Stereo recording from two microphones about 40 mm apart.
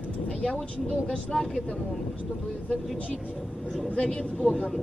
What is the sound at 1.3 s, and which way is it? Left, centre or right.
Speech, centre.